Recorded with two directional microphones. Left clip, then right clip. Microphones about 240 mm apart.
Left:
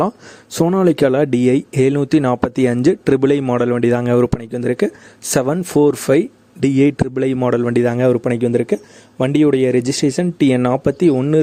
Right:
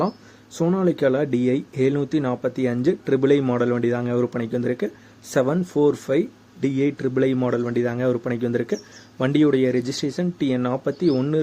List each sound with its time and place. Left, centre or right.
0.5 s speech: left